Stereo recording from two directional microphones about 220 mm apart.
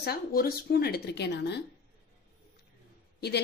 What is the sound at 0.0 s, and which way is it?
Speech, 45° left (ahead or behind).